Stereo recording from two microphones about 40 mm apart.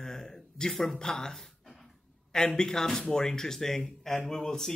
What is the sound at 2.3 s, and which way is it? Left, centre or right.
A man's voice, centre.